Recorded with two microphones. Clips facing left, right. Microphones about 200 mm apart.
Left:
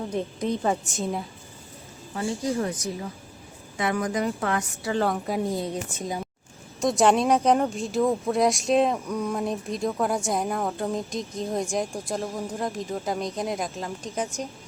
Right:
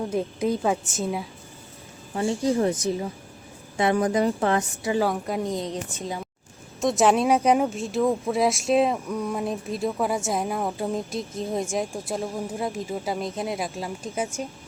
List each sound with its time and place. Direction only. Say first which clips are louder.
0.1 s speech: right 1 dB; 5° right (ahead or behind)
2.1 s a woman's voice: right 4 dB; 30° right (ahead or behind)
3.8 s a woman's voice: right 4 dB; 30° right (ahead or behind)
4.9 s speech: right 1 dB; 5° right (ahead or behind)